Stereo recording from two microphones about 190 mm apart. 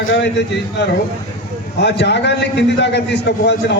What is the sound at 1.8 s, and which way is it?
A man's voice, 65° left (ahead or behind).